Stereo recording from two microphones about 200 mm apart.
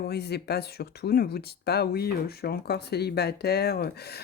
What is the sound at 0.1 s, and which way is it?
Speech, 55° left (ahead or behind).